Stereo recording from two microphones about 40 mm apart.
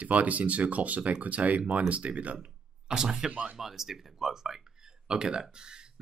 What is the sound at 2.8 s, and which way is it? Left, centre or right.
Speech, centre.